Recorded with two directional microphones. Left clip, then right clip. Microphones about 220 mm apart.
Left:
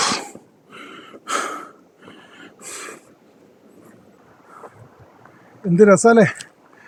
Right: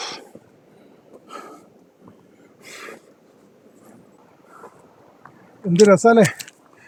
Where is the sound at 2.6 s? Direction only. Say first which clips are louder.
Left 2 dB; 5° left (ahead or behind).